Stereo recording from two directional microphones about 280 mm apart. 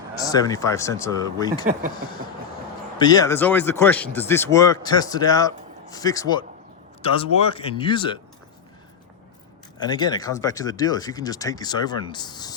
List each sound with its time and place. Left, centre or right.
0.3 s speech: centre
3.0 s speech: centre
9.7 s speech: centre